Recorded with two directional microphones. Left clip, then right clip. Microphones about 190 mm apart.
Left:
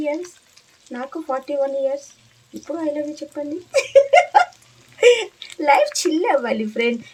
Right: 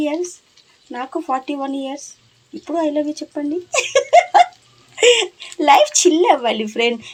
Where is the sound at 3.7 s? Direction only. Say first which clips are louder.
Even; 20° right (ahead or behind).